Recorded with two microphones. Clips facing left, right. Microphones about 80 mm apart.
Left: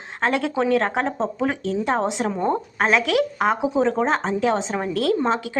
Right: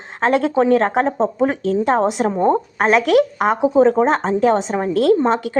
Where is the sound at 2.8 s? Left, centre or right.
Right.